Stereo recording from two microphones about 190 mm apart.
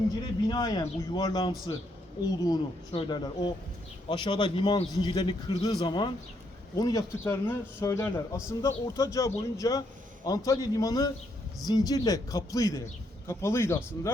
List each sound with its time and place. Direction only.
0.4 s a man's voice: 20° left (ahead or behind)